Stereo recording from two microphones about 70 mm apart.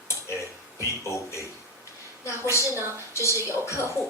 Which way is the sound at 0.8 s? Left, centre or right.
Left.